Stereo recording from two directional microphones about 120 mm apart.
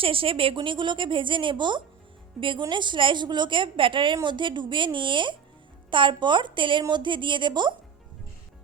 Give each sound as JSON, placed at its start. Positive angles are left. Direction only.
{"t": 0.0, "sound": "a woman's voice", "side_deg": -50}